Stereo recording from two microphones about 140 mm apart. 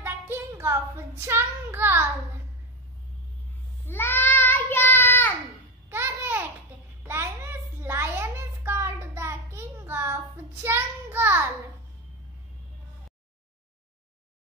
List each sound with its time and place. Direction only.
0.0 s child singing: 20° right (ahead or behind)
3.8 s child singing: 15° left (ahead or behind)
5.9 s babbling: 15° right (ahead or behind)
7.0 s a sound: 20° right (ahead or behind)